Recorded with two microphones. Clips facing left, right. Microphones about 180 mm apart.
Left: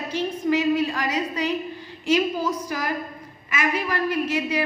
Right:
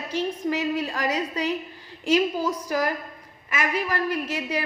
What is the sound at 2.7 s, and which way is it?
A woman's voice, 40° right (ahead or behind).